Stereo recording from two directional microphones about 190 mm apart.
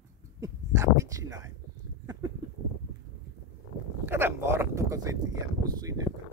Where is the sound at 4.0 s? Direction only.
15° right (ahead or behind).